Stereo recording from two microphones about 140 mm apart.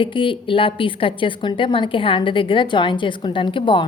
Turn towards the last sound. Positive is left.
turn(degrees=35)  # may be behind; listen again after turning